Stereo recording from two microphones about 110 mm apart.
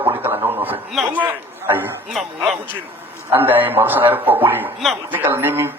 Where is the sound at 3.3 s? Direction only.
20° right (ahead or behind).